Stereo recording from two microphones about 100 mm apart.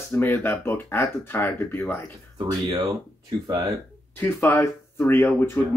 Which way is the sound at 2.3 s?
45° right (ahead or behind).